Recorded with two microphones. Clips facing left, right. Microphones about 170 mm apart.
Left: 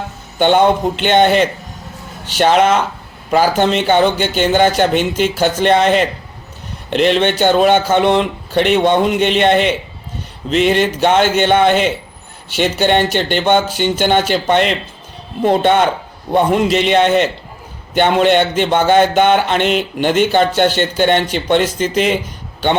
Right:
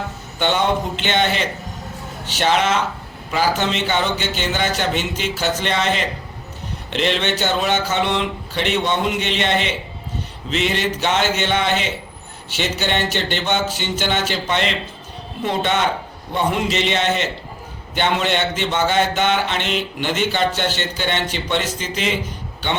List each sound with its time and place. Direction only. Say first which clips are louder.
0.3 s speech: left 7 dB; 50° left (ahead or behind)